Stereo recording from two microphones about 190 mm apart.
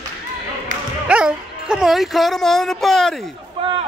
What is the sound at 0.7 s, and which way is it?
Basketball bounce, 40° right (ahead or behind).